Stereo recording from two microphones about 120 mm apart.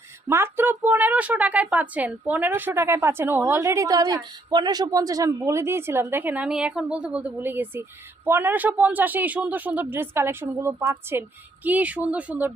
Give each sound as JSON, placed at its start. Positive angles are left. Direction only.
{"t": 0.3, "sound": "a woman's voice", "side_deg": -20}